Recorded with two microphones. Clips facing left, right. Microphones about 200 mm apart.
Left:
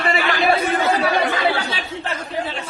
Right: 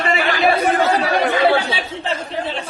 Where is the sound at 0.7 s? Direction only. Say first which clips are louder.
Right 2 dB; 35° right (ahead or behind).